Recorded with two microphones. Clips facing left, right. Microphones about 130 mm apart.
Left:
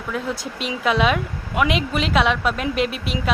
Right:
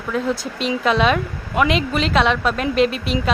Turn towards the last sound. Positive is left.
turn(degrees=5)  # may be behind; listen again after turning